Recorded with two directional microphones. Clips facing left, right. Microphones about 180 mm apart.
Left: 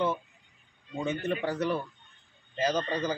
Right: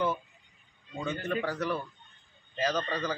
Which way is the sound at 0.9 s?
20° left (ahead or behind).